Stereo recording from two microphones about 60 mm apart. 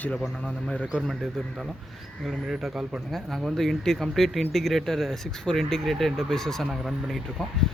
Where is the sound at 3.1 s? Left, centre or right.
Centre.